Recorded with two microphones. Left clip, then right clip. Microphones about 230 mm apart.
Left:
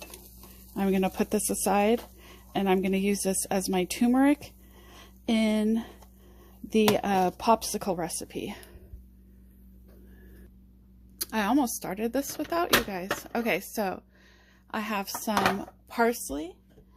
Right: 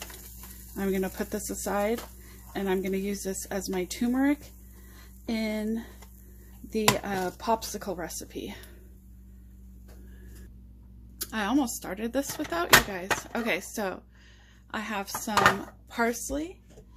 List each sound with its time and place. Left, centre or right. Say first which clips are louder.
0.8 s speech: left 3 dB; left
11.2 s speech: left 2 dB; left